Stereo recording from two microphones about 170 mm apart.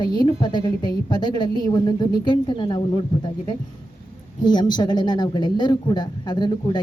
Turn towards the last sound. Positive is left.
turn(degrees=25)  # may be behind; listen again after turning